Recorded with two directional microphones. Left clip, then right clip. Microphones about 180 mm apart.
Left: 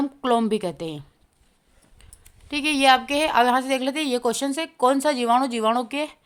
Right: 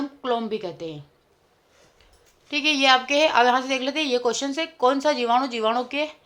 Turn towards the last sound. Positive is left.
turn(degrees=40)  # may be behind; listen again after turning